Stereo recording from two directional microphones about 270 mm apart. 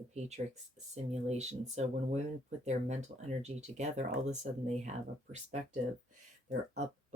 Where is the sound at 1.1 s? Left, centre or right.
Right.